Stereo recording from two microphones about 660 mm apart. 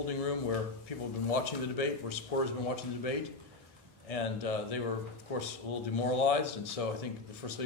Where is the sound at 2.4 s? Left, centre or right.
Left.